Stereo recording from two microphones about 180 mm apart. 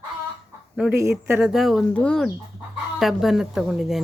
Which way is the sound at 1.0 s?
15° right (ahead or behind).